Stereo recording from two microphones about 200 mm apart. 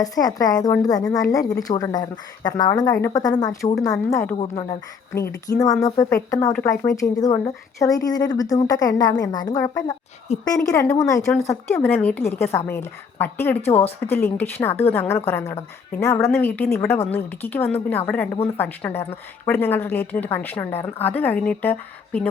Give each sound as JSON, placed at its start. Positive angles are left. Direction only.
{"t": 0.0, "sound": "a woman's voice", "side_deg": 20}
{"t": 10.3, "sound": "a woman's voice", "side_deg": 30}
{"t": 10.7, "sound": "a woman's voice", "side_deg": 15}